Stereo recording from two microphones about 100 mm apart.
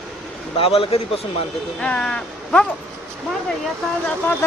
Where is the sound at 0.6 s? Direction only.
75° left (ahead or behind).